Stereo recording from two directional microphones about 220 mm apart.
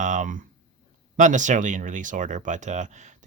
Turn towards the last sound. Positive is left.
turn(degrees=-35)  # may be behind; listen again after turning